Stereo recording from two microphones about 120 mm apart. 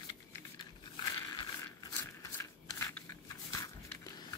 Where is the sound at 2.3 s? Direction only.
25° left (ahead or behind).